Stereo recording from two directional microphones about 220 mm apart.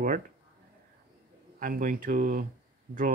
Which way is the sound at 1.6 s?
40° right (ahead or behind).